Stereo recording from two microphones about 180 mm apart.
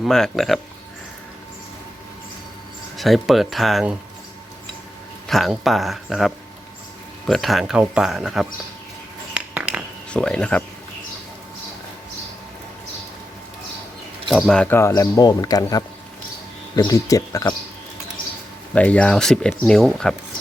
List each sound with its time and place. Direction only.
0.0 s speech: centre (ahead or behind)
3.0 s speech: centre (ahead or behind)
5.3 s speech: centre (ahead or behind)
9.3 s a sound: 5° right (ahead or behind)
10.1 s speech: 5° left (ahead or behind)
14.3 s speech: centre (ahead or behind); by 17.5 s 20° left (ahead or behind)
18.7 s speech: 5° left (ahead or behind)